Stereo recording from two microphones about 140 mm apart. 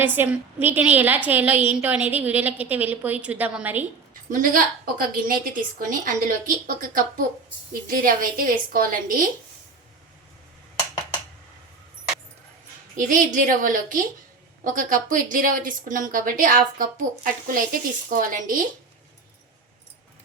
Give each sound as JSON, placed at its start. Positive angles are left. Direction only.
{"t": 0.0, "sound": "a woman's voice", "side_deg": -15}
{"t": 4.3, "sound": "a woman's voice", "side_deg": -75}
{"t": 7.7, "sound": "a woman's voice", "side_deg": -90}
{"t": 13.0, "sound": "speech", "side_deg": -70}